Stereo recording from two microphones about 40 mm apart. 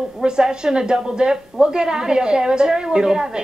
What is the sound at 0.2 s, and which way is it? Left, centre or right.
A man's voice, centre.